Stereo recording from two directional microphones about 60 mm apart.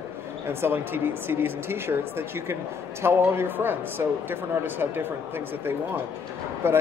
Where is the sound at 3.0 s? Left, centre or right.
Right.